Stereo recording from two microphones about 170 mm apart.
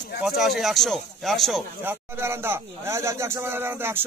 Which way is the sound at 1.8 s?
15° right (ahead or behind).